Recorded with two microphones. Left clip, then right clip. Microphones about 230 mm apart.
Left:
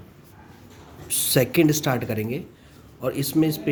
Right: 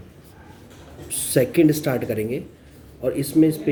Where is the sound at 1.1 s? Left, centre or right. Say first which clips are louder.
Right 1 dB; left.